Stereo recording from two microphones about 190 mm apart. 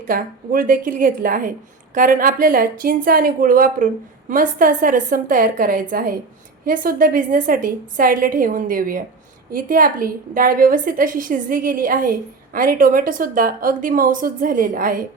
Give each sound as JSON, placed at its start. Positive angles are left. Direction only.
{"t": 0.0, "sound": "a woman's voice", "side_deg": -45}